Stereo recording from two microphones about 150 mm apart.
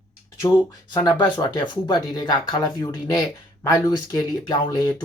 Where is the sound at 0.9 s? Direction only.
30° left (ahead or behind).